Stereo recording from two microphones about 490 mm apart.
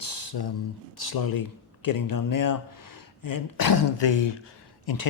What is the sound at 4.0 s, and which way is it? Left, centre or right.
Speech, left.